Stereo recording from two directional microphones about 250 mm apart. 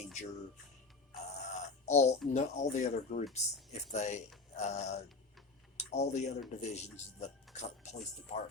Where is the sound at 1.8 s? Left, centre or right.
Left.